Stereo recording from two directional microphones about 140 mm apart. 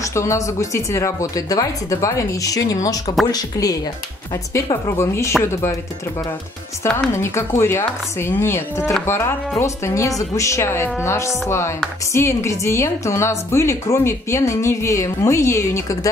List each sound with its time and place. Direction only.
0.0 s speech: 20° left (ahead or behind)
7.2 s speech: 20° left (ahead or behind)